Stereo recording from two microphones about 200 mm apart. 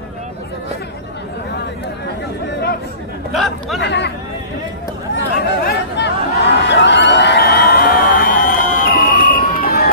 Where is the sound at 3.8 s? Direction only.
60° left (ahead or behind).